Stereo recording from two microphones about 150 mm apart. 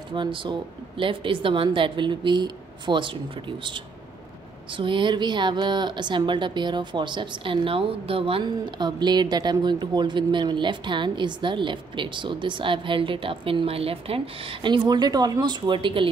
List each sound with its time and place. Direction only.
0.1 s a woman's voice: 35° right (ahead or behind)